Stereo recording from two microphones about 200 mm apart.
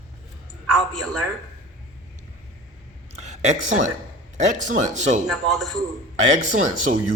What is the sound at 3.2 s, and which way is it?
Speech, 35° right (ahead or behind).